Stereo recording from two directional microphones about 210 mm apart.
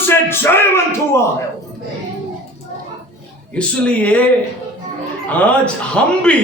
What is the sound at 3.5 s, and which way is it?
Speech, 5° left (ahead or behind).